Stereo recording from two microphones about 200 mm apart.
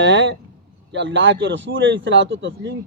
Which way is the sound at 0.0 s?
65° right (ahead or behind).